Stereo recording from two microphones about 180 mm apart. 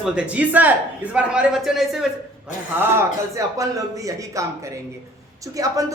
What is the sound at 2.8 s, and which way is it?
A woman's voice, 15° right (ahead or behind).